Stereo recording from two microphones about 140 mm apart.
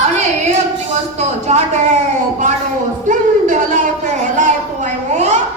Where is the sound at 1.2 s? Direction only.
55° right (ahead or behind).